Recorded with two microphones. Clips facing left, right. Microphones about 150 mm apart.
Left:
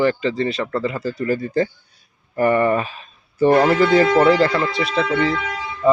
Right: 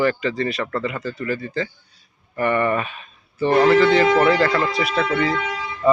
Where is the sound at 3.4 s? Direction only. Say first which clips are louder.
Even; 45° left (ahead or behind).